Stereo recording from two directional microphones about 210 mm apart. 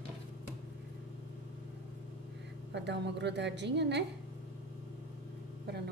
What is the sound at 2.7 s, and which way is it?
A woman's voice, 55° right (ahead or behind).